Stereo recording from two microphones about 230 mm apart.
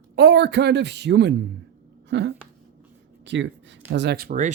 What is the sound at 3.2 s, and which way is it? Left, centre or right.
Speech, right.